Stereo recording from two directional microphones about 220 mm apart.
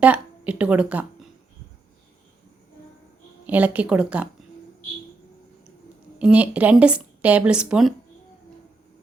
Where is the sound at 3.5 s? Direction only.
5° right (ahead or behind).